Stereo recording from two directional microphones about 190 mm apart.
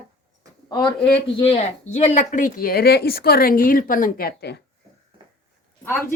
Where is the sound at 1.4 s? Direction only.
30° left (ahead or behind); by 4.6 s 60° left (ahead or behind).